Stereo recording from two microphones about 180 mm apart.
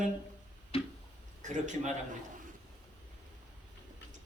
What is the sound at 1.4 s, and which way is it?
Speech, 40° right (ahead or behind).